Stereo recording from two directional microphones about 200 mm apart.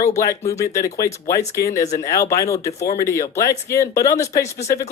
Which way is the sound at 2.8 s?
50° left (ahead or behind).